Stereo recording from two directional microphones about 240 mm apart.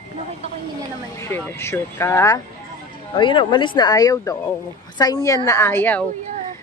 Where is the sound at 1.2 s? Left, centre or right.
Centre.